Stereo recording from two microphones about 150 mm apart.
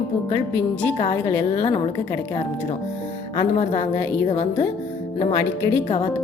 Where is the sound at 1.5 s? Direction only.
40° left (ahead or behind).